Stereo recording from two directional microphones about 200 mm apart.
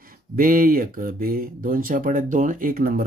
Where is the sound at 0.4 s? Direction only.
45° right (ahead or behind).